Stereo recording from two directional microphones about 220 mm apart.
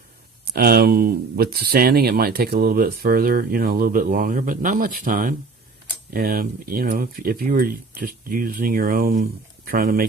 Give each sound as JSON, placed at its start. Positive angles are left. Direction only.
{"t": 0.5, "sound": "speech", "side_deg": -45}